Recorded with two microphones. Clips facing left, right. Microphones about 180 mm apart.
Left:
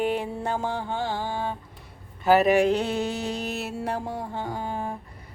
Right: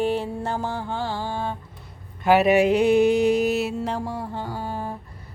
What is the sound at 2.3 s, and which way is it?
Mantra, 5° right (ahead or behind).